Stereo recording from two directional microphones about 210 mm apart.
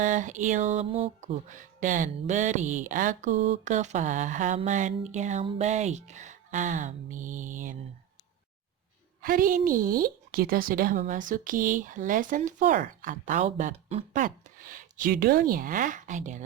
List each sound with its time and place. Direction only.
0.0 s a woman's voice: 35° right (ahead or behind)
1.5 s a woman's voice: 40° right (ahead or behind)
9.2 s a woman's voice: 40° right (ahead or behind)